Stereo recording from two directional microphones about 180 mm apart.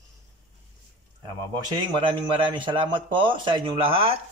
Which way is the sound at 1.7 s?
25° right (ahead or behind).